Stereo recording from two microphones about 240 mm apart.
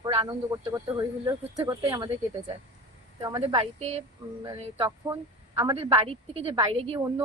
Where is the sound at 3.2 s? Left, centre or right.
Centre.